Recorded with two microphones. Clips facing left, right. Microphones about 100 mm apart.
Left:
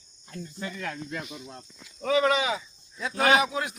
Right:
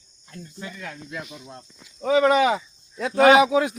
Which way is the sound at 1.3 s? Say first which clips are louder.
Right 1 dB; 20° right (ahead or behind).